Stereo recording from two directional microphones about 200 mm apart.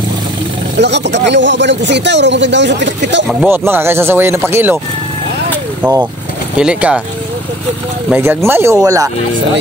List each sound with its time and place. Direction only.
0.7 s speech: 60° right (ahead or behind)
3.4 s speech: 10° right (ahead or behind)
5.8 s speech: 10° right (ahead or behind)
8.1 s speech: 10° right (ahead or behind)